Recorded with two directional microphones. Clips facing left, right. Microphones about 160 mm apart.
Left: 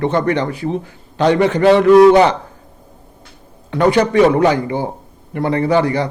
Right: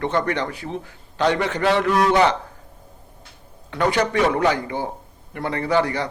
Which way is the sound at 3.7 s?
25° left (ahead or behind).